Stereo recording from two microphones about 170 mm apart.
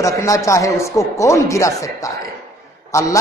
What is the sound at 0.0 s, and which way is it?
A man's voice, 20° left (ahead or behind).